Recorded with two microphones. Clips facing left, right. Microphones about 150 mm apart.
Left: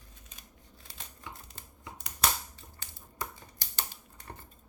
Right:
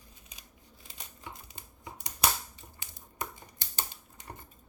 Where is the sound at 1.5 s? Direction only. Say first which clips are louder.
Right 1 dB; 10° right (ahead or behind).